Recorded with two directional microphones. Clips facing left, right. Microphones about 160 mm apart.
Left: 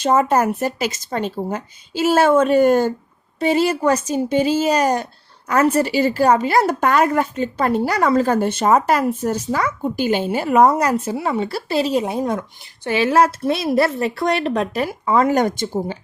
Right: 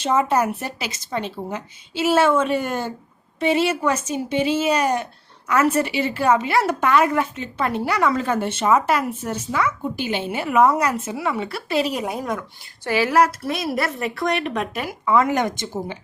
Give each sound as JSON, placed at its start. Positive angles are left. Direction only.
{"t": 0.0, "sound": "a woman's voice", "side_deg": 40}